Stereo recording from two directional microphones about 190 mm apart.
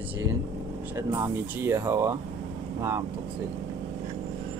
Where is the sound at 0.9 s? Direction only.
15° right (ahead or behind).